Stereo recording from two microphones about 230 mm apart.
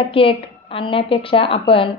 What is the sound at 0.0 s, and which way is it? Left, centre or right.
A woman's voice, left.